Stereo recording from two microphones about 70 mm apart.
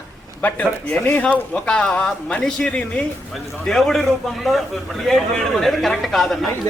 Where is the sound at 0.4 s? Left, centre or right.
Left.